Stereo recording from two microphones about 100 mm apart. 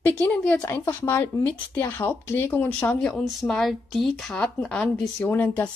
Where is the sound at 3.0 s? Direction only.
5° left (ahead or behind).